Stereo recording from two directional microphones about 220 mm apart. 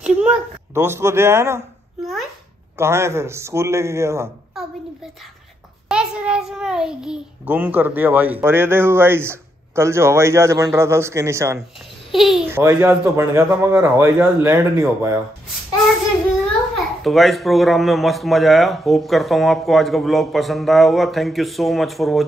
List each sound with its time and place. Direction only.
0.0 s a woman's voice: 5° right (ahead or behind)
2.8 s a child's voice: 10° right (ahead or behind)
5.9 s a child's voice: 5° right (ahead or behind)
12.1 s a child's voice: centre (ahead or behind)
16.7 s speech: centre (ahead or behind)